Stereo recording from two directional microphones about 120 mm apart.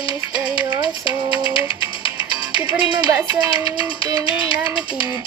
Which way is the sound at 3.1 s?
25° right (ahead or behind).